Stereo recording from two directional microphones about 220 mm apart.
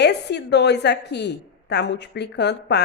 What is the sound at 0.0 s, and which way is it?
A woman's voice, 50° left (ahead or behind).